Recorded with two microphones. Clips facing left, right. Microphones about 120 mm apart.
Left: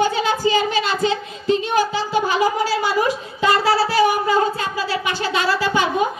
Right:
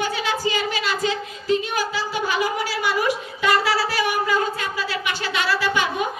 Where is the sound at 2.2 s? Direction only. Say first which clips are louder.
Left 5 dB; 30° left (ahead or behind).